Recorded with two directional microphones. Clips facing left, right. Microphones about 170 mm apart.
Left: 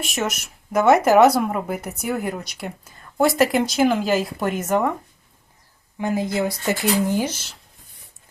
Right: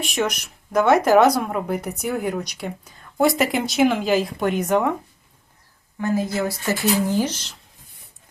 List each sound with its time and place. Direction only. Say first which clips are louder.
0.0 s speech: right 2 dB; centre (ahead or behind)
6.0 s speech: even; 15° left (ahead or behind)